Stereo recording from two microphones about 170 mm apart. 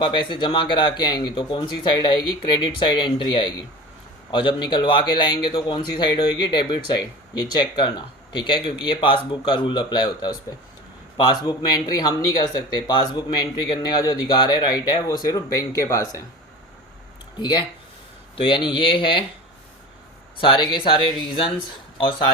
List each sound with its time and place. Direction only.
0.0 s speech: 25° left (ahead or behind)
17.4 s speech: 25° left (ahead or behind)
20.4 s speech: 30° left (ahead or behind)